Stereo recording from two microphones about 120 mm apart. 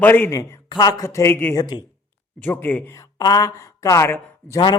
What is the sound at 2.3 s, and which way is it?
Speech, 15° left (ahead or behind).